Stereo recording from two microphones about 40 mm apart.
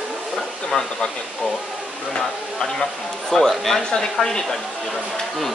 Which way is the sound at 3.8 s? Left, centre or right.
Left.